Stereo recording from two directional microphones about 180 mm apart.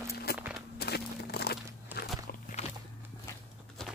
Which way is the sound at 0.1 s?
60° left (ahead or behind).